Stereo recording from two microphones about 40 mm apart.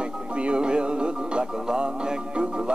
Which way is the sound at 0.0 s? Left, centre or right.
Right.